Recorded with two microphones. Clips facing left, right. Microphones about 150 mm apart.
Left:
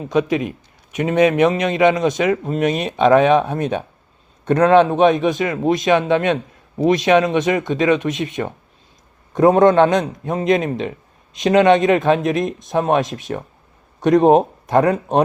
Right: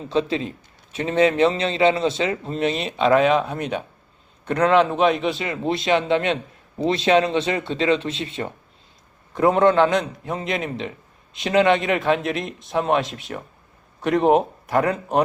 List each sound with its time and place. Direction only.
0.0 s a man's voice: 15° left (ahead or behind)
4.9 s a man's voice: 15° left (ahead or behind)